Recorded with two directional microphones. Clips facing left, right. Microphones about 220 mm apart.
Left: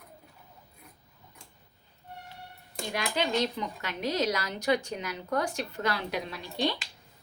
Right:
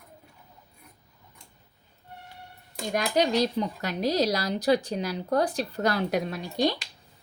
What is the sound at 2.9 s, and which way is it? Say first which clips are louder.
Speech: right 5 dB; 40° right (ahead or behind).